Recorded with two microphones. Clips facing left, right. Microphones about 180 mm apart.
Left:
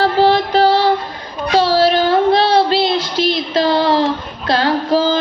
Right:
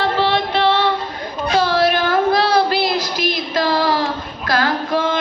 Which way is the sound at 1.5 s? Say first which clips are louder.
Left 4 dB; 30° left (ahead or behind).